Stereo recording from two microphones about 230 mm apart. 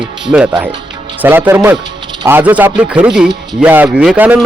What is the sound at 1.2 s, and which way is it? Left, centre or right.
A man's voice, centre.